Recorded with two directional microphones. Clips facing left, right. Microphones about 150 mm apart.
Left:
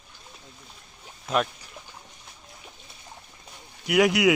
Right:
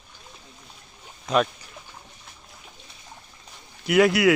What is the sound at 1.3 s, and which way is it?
Speech, 5° left (ahead or behind).